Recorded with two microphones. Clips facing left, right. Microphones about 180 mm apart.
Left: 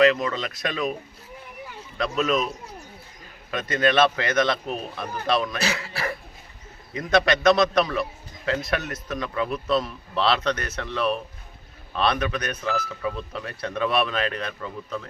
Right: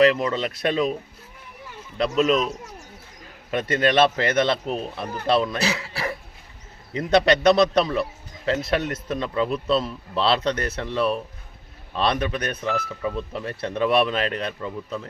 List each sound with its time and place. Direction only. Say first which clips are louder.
0.0 s speech: right 1 dB; 30° right (ahead or behind)
2.0 s a man's voice: right 4 dB; 30° right (ahead or behind)
3.5 s a man's voice: right 2 dB; 30° right (ahead or behind)
6.9 s a man's voice: right 3 dB; 30° right (ahead or behind)